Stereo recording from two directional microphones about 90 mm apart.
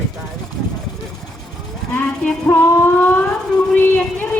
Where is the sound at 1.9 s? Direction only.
15° left (ahead or behind).